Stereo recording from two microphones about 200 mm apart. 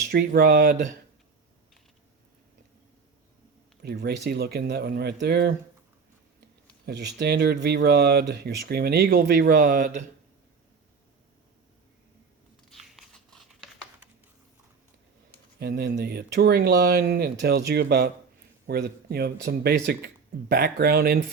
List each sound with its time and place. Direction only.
0.1 s speech: 50° right (ahead or behind)
3.8 s speech: 55° right (ahead or behind)
6.8 s speech: 55° right (ahead or behind); by 10.1 s 40° right (ahead or behind)
12.7 s biting: centre (ahead or behind)
15.5 s speech: 55° right (ahead or behind)